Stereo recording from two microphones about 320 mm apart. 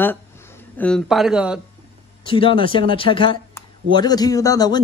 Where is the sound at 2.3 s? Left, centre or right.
Centre.